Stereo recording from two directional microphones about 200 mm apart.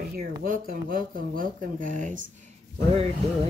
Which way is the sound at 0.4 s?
45° right (ahead or behind).